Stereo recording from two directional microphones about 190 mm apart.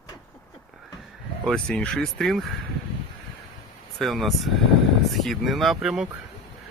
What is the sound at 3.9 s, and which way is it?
Speech, centre (ahead or behind).